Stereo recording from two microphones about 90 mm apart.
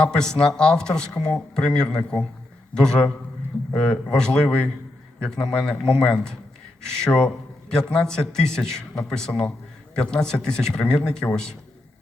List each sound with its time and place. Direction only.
0.2 s speech: 5° left (ahead or behind)